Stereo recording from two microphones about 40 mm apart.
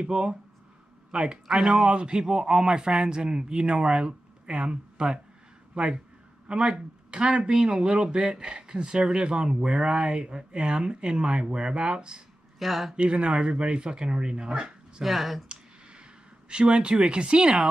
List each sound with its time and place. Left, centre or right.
0.0 s a man's voice: right
1.9 s a man's voice: right
12.5 s speech: centre
12.9 s a man's voice: right
15.0 s speech: centre
15.4 s clicking: right
16.4 s a man's voice: right
17.4 s speech: centre